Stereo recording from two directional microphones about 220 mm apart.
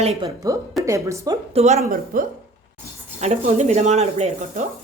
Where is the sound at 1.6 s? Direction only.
30° right (ahead or behind).